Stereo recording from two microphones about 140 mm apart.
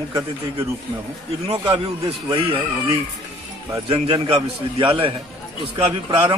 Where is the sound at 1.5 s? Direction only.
45° right (ahead or behind).